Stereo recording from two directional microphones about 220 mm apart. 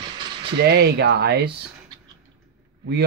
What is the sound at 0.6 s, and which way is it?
Speech, 45° right (ahead or behind).